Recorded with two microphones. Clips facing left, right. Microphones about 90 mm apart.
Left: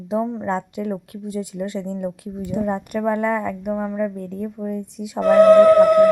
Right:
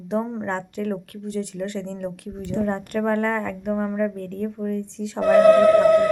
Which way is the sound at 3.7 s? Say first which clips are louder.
Right 1 dB; centre (ahead or behind).